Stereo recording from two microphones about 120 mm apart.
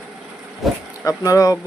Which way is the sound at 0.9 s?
30° left (ahead or behind).